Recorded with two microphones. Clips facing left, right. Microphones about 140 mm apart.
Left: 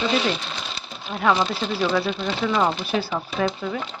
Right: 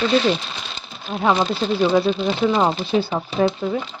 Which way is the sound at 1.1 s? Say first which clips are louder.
Right 2 dB; 25° right (ahead or behind).